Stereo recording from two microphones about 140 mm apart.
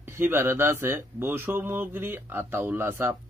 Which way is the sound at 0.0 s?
15° right (ahead or behind).